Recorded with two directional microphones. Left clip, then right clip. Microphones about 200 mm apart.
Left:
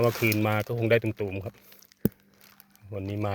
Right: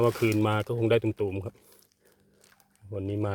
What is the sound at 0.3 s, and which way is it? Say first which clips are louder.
Speech: even; 10° right (ahead or behind).